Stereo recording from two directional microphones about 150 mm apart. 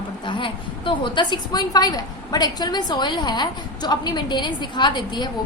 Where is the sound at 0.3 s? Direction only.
35° left (ahead or behind).